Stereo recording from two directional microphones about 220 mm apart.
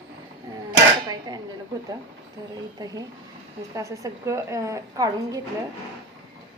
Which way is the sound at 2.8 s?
15° right (ahead or behind).